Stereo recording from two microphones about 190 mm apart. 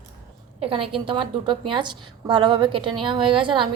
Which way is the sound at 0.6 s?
30° right (ahead or behind).